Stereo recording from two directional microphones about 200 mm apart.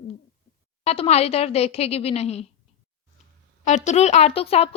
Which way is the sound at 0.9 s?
30° left (ahead or behind).